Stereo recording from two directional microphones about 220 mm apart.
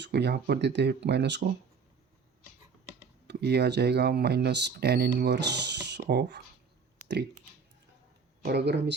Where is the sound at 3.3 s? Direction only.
50° right (ahead or behind).